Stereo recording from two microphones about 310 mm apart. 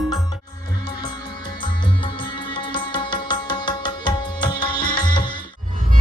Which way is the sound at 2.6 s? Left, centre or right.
Centre.